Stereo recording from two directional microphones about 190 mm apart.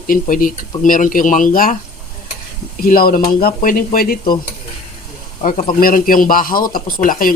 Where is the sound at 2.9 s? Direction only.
50° left (ahead or behind).